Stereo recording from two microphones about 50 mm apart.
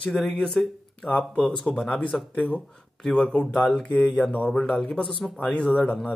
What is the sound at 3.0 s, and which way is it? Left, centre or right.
Speech, centre.